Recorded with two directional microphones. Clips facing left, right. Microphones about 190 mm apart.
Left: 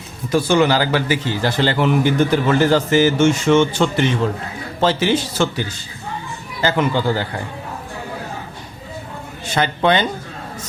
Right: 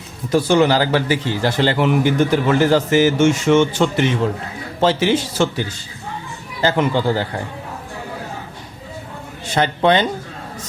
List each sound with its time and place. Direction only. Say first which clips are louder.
0.3 s a man's voice: right 1 dB; 35° right (ahead or behind)
9.6 s speech: right 1 dB; 30° right (ahead or behind)